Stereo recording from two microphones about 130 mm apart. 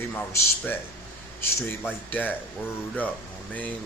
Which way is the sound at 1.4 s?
20° left (ahead or behind).